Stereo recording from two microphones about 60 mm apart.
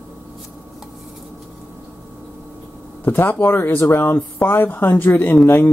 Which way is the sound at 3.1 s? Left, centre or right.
Left.